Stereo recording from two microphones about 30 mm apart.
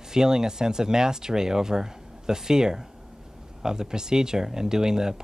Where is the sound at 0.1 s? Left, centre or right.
Centre.